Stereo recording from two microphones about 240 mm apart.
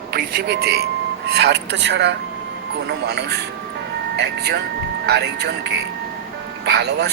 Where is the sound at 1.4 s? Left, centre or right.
Right.